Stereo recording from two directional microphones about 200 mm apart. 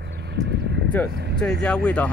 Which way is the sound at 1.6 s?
5° left (ahead or behind).